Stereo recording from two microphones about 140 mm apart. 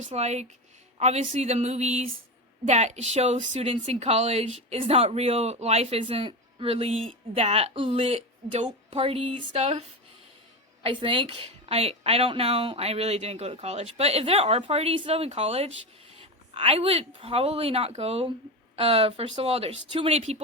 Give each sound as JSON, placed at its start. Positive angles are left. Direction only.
{"t": 0.0, "sound": "a woman's voice", "side_deg": -50}
{"t": 10.8, "sound": "a woman's voice", "side_deg": -40}